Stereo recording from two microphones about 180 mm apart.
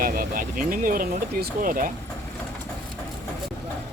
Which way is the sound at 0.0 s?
50° right (ahead or behind).